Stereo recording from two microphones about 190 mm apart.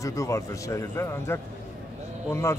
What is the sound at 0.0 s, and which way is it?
A man's voice, 15° left (ahead or behind).